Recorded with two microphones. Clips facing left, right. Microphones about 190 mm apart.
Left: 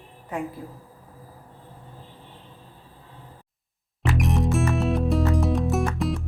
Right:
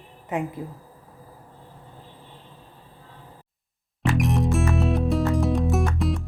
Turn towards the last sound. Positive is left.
turn(degrees=0)  # may be behind; listen again after turning